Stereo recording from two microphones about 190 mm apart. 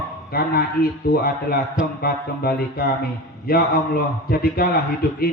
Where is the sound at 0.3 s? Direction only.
55° left (ahead or behind).